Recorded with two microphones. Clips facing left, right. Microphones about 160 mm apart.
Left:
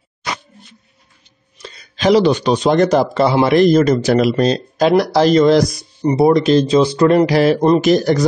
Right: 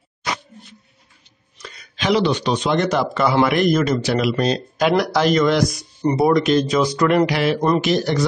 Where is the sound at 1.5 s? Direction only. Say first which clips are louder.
Left 3 dB; 25° left (ahead or behind).